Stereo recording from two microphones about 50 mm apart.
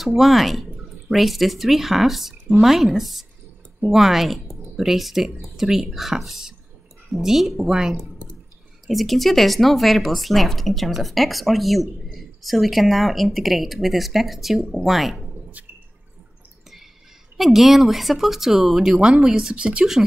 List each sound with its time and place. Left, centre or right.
0.0 s speech: centre
8.8 s speech: centre
17.4 s speech: centre
18.9 s speech: centre